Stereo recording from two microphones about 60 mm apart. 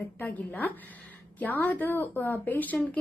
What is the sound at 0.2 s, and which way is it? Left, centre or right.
A woman's voice, left.